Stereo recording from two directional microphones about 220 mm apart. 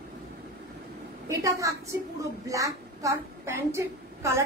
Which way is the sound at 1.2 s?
15° right (ahead or behind).